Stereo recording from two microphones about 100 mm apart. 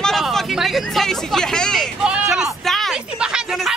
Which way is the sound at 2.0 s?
10° right (ahead or behind).